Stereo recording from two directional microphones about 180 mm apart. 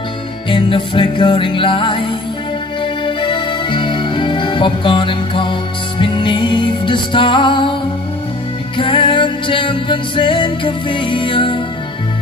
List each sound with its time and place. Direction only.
0.5 s music: 30° left (ahead or behind)
8.7 s music: 30° left (ahead or behind)